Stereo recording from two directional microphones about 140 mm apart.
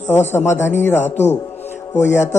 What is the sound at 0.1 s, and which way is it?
A man's voice, 15° left (ahead or behind).